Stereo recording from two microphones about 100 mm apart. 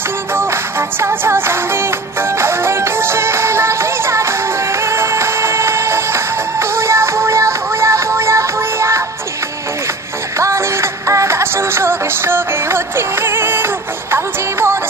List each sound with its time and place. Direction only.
0.3 s music: 25° right (ahead or behind)
10.3 s music: 30° right (ahead or behind)